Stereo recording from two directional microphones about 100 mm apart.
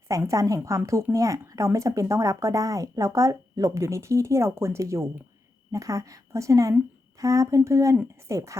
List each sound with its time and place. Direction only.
0.1 s speech: 35° right (ahead or behind)